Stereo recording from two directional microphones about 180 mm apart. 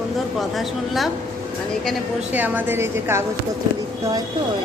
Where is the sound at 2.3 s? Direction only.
10° right (ahead or behind).